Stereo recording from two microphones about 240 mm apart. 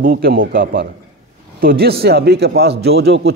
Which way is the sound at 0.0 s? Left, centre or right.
Right.